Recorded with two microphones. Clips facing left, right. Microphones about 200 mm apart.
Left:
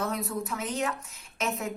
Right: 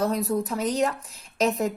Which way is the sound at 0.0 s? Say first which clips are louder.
Right 7 dB; 35° right (ahead or behind).